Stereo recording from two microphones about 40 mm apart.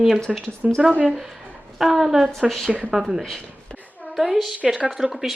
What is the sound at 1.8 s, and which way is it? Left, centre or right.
Speech, centre.